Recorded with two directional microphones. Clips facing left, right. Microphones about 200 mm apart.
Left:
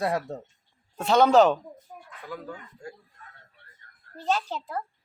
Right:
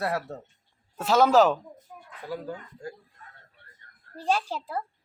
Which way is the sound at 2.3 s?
35° right (ahead or behind).